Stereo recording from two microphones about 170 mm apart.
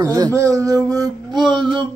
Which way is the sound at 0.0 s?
20° right (ahead or behind).